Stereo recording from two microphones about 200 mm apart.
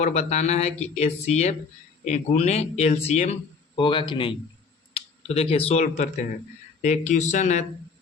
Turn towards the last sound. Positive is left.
turn(degrees=35)  # may be behind; listen again after turning